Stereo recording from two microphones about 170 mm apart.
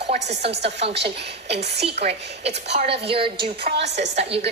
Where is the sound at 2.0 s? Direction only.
45° right (ahead or behind).